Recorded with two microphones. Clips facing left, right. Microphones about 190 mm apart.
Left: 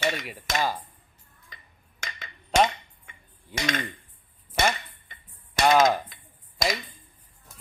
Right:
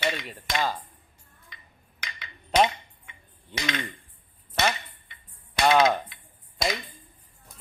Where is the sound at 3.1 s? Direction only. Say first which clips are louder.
Left 2 dB; 45° left (ahead or behind).